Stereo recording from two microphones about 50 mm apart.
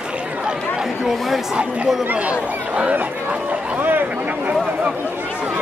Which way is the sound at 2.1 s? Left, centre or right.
Right.